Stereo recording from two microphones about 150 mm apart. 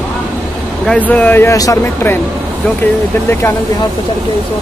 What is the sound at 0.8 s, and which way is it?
Speech, 10° left (ahead or behind).